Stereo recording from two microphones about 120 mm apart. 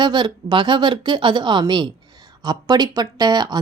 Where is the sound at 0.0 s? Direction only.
40° right (ahead or behind).